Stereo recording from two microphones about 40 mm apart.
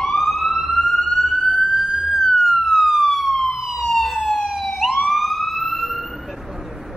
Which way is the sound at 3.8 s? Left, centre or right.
Centre.